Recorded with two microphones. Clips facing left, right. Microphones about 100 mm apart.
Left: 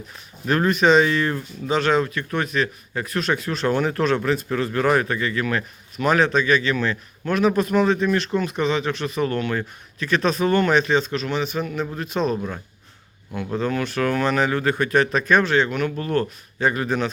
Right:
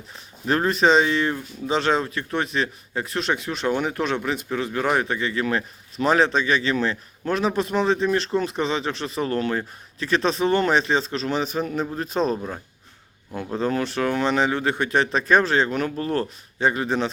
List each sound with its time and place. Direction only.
0.4 s speech: 30° right (ahead or behind)
13.6 s speech: 30° right (ahead or behind)